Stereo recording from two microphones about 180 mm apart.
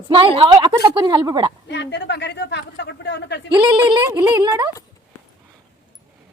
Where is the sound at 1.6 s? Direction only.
70° left (ahead or behind).